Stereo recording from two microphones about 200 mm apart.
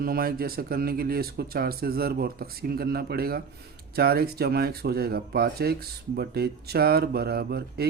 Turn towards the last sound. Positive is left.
turn(degrees=-50)  # may be behind; listen again after turning